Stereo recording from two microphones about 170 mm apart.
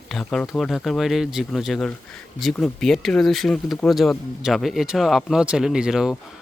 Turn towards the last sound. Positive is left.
turn(degrees=-5)  # may be behind; listen again after turning